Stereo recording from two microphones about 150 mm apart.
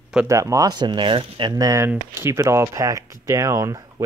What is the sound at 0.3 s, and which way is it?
Speech, 20° right (ahead or behind).